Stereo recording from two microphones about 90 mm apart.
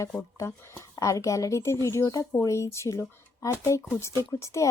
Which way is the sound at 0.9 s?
40° left (ahead or behind).